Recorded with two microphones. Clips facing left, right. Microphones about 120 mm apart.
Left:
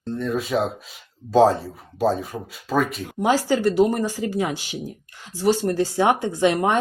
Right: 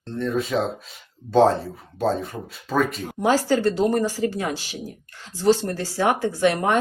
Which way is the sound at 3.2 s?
15° left (ahead or behind).